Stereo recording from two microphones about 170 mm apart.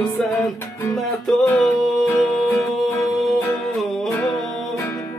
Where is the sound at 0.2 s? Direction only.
5° left (ahead or behind).